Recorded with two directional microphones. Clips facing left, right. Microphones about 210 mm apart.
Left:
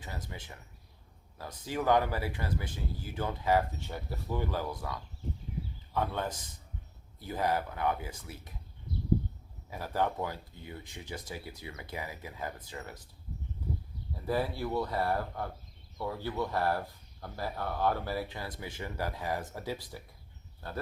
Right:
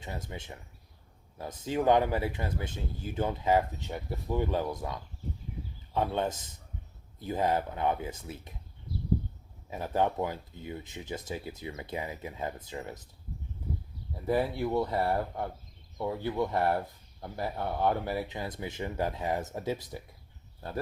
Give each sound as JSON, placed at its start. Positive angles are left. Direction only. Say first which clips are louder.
{"t": 0.0, "sound": "speech", "louder": "right 3 dB", "side_deg": -25}
{"t": 9.6, "sound": "speech", "louder": "right 3 dB", "side_deg": -20}
{"t": 14.3, "sound": "speech", "louder": "right 3 dB", "side_deg": -20}